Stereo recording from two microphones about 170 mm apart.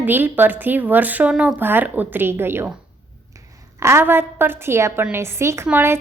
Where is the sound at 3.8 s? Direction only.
15° right (ahead or behind).